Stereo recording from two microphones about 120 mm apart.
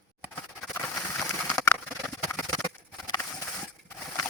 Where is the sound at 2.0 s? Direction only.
20° left (ahead or behind).